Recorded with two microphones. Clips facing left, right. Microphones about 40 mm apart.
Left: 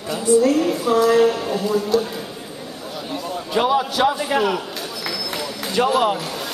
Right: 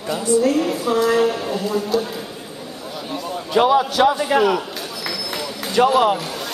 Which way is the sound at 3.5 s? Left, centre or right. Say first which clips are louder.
Right 3 dB; centre.